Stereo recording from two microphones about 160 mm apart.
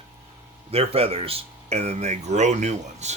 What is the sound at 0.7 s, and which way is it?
Speech, 40° right (ahead or behind).